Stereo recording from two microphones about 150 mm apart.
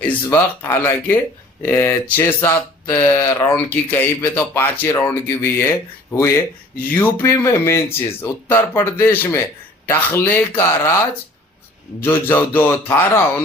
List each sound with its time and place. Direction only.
0.3 s speech: 15° left (ahead or behind)